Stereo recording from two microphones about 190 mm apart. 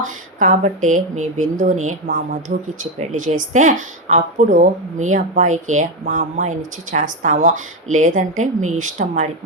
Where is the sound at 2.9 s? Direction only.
40° right (ahead or behind).